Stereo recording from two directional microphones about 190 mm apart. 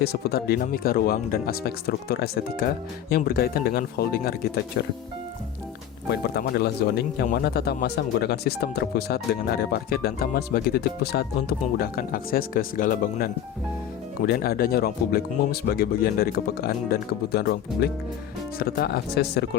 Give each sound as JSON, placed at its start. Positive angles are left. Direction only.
{"t": 0.0, "sound": "speech", "side_deg": 55}
{"t": 6.1, "sound": "speech", "side_deg": 60}